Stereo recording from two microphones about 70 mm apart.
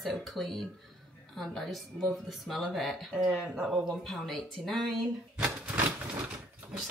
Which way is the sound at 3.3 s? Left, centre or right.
Centre.